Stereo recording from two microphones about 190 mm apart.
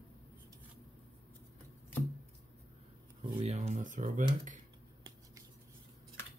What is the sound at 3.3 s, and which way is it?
Computer keyboard, 35° right (ahead or behind).